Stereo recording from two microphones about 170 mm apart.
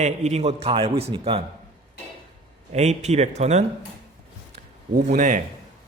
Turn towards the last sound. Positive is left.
turn(degrees=-50)  # may be behind; listen again after turning